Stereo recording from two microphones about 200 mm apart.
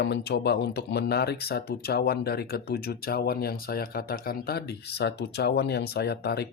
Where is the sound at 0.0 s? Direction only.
60° left (ahead or behind).